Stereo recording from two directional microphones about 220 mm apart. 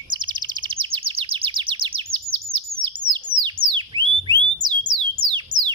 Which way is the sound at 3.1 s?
20° right (ahead or behind).